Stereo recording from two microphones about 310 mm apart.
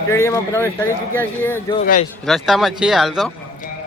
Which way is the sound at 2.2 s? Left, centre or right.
Centre.